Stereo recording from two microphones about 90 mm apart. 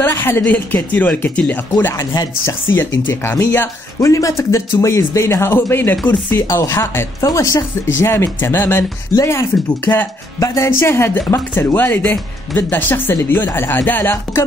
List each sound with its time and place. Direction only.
0.0 s a sound: 25° left (ahead or behind)
0.4 s speech: 20° left (ahead or behind)
6.3 s speech: 35° left (ahead or behind)
9.1 s speech: 35° left (ahead or behind)